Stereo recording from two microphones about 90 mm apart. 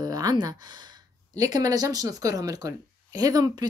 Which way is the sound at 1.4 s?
45° right (ahead or behind).